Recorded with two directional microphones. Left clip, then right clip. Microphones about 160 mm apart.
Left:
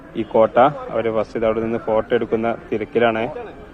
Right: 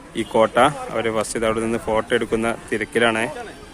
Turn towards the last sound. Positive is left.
turn(degrees=-15)  # may be behind; listen again after turning